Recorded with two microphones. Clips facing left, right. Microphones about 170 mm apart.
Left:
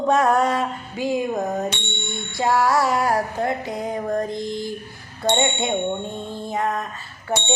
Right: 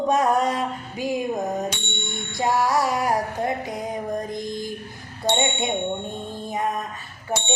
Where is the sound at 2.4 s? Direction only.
15° right (ahead or behind).